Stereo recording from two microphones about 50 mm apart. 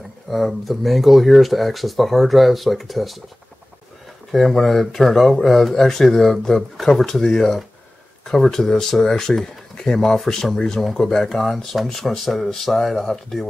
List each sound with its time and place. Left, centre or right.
0.3 s speech: centre
4.3 s speech: centre